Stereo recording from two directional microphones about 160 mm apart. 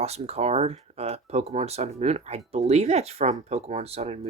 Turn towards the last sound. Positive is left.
turn(degrees=-40)  # may be behind; listen again after turning